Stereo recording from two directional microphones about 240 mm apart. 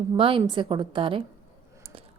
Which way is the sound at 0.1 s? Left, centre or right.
Right.